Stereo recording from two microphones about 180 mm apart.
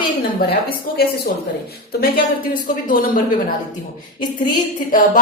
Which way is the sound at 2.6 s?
50° left (ahead or behind).